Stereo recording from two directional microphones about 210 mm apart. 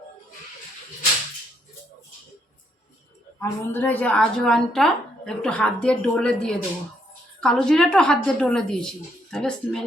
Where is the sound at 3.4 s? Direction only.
10° left (ahead or behind).